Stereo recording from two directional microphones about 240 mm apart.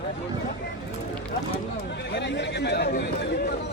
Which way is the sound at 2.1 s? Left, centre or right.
Left.